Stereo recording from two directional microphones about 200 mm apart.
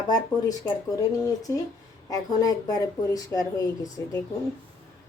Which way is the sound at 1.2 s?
15° left (ahead or behind).